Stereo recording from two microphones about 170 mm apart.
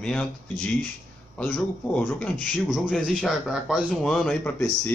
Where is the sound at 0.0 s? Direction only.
5° left (ahead or behind).